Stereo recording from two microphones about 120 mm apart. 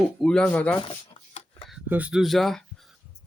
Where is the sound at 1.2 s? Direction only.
45° left (ahead or behind).